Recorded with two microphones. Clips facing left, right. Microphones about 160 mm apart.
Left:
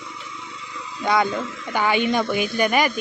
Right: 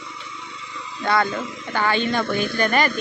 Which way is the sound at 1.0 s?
15° left (ahead or behind).